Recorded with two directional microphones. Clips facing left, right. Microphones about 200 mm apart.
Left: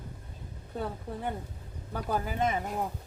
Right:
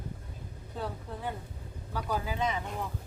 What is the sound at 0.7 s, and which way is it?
Speech, 55° left (ahead or behind).